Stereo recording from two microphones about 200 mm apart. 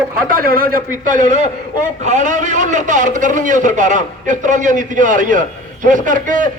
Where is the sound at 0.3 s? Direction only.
45° right (ahead or behind).